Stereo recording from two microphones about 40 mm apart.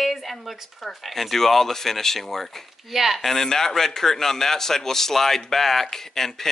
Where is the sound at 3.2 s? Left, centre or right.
Centre.